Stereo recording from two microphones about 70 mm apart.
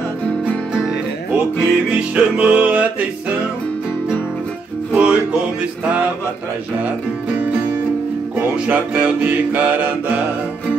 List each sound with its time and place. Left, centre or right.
1.3 s music: centre
4.9 s music: centre
8.5 s music: centre